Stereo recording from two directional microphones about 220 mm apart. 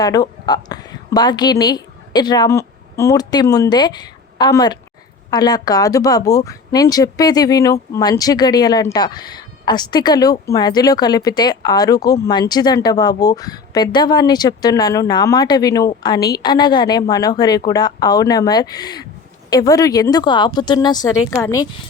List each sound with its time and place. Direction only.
0.0 s a woman's voice: 20° left (ahead or behind)